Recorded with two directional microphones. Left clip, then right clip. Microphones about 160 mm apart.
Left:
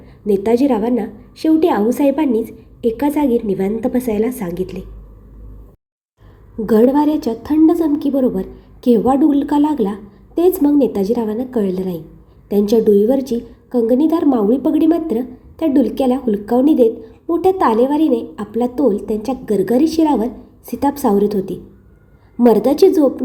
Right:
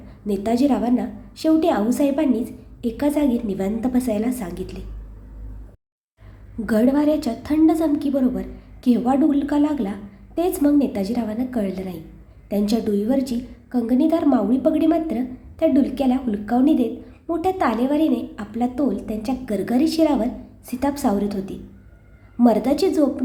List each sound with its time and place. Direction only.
0.3 s a woman's voice: 10° left (ahead or behind)
6.7 s a woman's voice: 15° left (ahead or behind)